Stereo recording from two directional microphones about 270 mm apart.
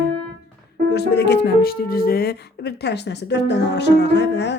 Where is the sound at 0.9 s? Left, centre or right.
Left.